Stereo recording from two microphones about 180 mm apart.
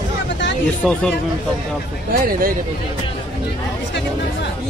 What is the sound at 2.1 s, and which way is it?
Speech, 55° right (ahead or behind).